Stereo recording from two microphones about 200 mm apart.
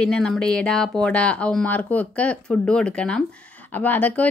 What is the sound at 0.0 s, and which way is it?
Speech, 5° left (ahead or behind).